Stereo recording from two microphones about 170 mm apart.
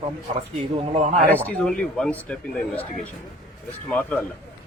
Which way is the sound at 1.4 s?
5° left (ahead or behind).